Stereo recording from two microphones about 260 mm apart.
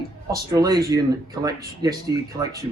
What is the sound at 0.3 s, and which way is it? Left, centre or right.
Speech, centre.